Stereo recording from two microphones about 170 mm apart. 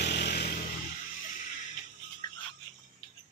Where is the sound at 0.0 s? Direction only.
80° left.